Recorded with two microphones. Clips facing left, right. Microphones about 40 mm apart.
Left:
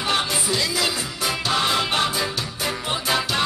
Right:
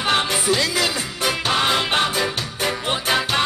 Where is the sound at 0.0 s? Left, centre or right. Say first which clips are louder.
Right 3 dB; right.